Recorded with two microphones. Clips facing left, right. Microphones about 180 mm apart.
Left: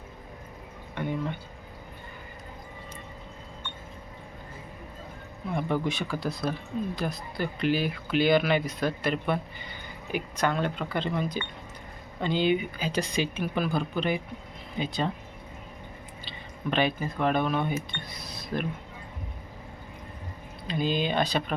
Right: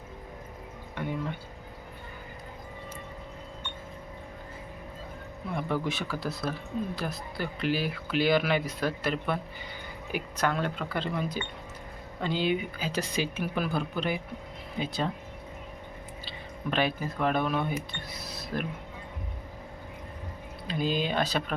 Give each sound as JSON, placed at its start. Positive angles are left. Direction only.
{"t": 0.9, "sound": "music", "side_deg": -5}
{"t": 5.5, "sound": "speech", "side_deg": 0}
{"t": 16.2, "sound": "speech", "side_deg": -5}
{"t": 20.7, "sound": "speech", "side_deg": -5}